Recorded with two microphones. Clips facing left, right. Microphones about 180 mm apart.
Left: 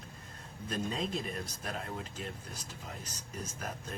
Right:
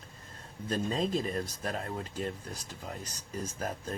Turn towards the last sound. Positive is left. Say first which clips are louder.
# right 5 dB
turn(degrees=-35)  # may be behind; listen again after turning